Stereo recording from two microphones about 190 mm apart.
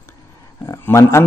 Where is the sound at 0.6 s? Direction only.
15° left (ahead or behind).